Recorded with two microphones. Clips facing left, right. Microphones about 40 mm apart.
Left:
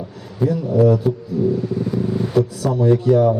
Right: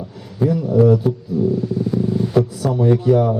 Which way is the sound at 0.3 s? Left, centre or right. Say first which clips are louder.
Right 1 dB; centre.